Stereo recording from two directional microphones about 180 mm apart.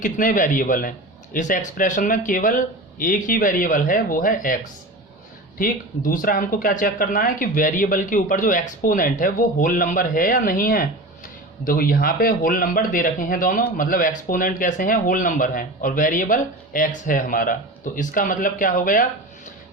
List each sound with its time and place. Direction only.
0.0 s speech: 45° left (ahead or behind)